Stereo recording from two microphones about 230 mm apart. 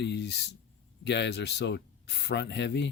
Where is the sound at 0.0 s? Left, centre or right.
Left.